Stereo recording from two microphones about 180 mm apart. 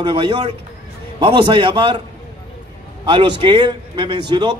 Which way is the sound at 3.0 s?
25° right (ahead or behind).